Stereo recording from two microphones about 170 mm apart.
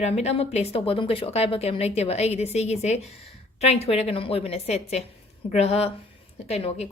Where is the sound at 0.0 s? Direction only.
40° left (ahead or behind).